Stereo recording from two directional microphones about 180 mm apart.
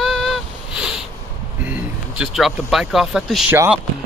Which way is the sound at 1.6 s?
5° right (ahead or behind).